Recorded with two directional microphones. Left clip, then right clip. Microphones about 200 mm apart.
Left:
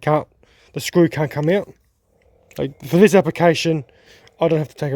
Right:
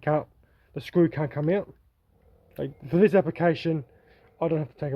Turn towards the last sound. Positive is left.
turn(degrees=55)  # may be behind; listen again after turning